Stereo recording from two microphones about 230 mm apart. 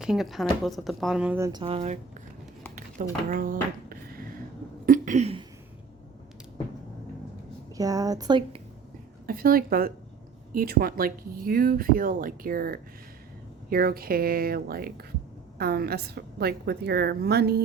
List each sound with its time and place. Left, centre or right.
0.0 s a woman's voice: centre; by 2.0 s right
3.2 s a sound: right
7.8 s speech: centre
9.2 s a woman's voice: right